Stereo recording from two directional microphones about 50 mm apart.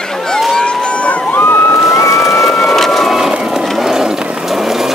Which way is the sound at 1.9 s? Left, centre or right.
Left.